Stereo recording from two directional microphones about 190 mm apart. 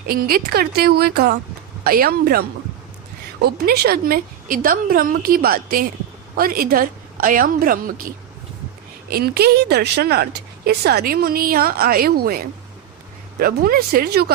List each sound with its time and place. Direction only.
0.1 s a woman's voice: 50° right (ahead or behind)
3.4 s a woman's voice: 55° right (ahead or behind)